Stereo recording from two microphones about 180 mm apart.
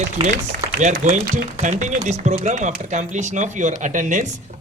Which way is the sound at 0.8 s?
40° right (ahead or behind).